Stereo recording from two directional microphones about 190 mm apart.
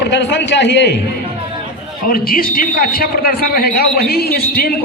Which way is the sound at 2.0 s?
50° left (ahead or behind).